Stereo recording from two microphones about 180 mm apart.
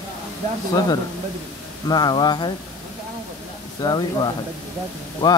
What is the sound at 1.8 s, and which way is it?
Speech, 25° left (ahead or behind).